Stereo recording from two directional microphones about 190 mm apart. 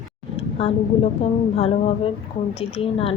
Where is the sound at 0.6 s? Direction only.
30° left (ahead or behind).